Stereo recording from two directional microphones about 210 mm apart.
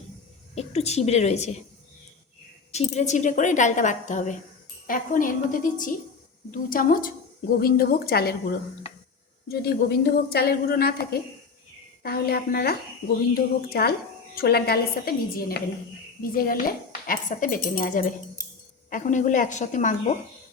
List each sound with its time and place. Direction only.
0.5 s speech: 30° left (ahead or behind)
2.7 s a woman's voice: 30° left (ahead or behind)